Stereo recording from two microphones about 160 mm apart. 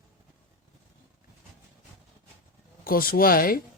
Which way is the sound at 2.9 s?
65° left (ahead or behind).